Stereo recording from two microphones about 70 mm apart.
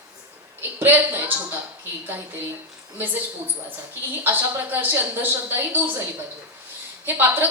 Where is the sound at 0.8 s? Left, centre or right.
Right.